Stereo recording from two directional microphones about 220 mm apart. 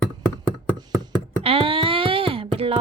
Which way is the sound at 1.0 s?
25° right (ahead or behind).